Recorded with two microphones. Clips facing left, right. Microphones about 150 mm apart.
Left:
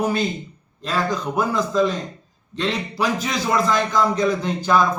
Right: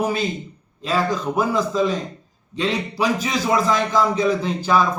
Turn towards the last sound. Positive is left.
turn(degrees=-5)  # may be behind; listen again after turning